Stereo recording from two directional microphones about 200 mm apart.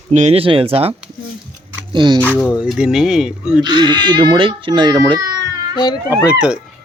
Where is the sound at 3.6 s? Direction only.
20° right (ahead or behind).